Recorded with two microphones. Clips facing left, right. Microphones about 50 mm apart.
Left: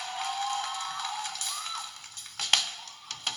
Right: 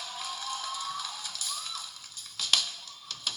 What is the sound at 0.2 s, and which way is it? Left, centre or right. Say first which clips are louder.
Music: left 7 dB; left.